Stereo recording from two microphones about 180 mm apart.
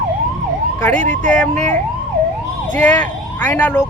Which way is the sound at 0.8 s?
5° left (ahead or behind).